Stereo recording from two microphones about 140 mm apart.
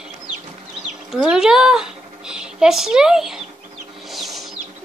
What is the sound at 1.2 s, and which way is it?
Speech, 5° right (ahead or behind).